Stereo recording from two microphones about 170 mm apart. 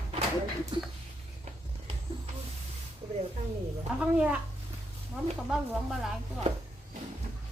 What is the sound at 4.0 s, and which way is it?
Speech, 5° right (ahead or behind).